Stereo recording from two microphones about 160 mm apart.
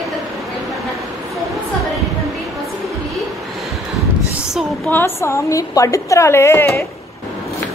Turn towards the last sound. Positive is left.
turn(degrees=15)  # may be behind; listen again after turning